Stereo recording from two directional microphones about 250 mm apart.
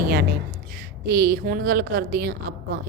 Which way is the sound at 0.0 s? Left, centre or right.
Right.